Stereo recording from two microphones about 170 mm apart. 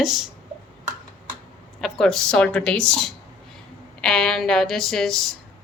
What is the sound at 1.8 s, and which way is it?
A woman's voice, centre (ahead or behind).